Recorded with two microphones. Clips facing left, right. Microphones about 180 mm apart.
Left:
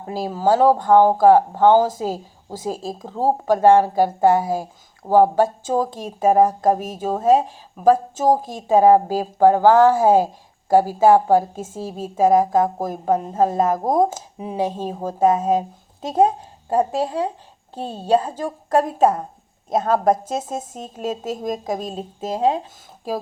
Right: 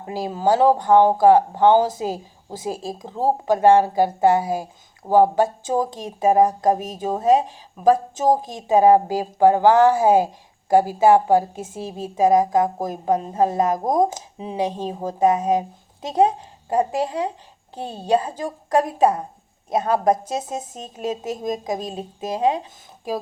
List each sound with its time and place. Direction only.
0.1 s speech: 15° right (ahead or behind)
18.0 s speech: 15° right (ahead or behind)